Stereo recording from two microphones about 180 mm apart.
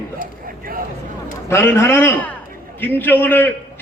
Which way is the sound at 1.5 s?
15° left (ahead or behind).